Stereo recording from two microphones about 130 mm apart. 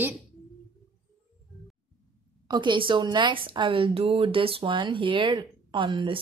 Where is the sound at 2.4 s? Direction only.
35° right (ahead or behind).